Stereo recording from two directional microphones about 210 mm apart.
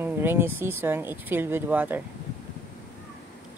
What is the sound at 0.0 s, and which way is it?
Speech, 10° right (ahead or behind).